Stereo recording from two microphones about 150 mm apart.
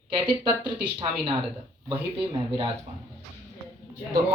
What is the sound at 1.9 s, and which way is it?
Speech, 35° right (ahead or behind).